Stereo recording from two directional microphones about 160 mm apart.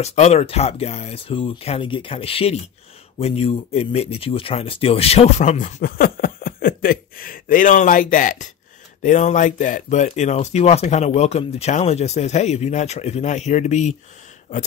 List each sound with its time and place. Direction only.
0.0 s speech: 40° left (ahead or behind)